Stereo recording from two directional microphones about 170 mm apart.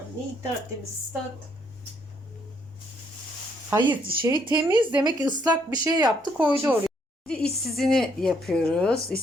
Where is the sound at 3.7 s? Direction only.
25° right (ahead or behind).